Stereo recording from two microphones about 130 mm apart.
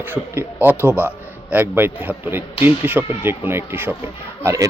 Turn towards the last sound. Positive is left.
turn(degrees=-25)  # may be behind; listen again after turning